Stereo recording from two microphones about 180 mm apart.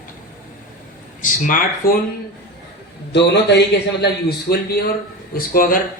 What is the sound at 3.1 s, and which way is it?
A man's voice, 70° left (ahead or behind).